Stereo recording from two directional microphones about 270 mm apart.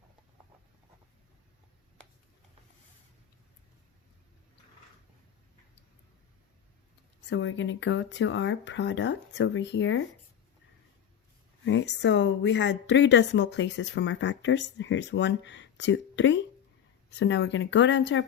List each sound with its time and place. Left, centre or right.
7.3 s speech: left
11.6 s speech: left